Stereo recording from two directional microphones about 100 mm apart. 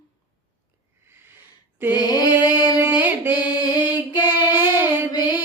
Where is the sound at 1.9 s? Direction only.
40° left (ahead or behind).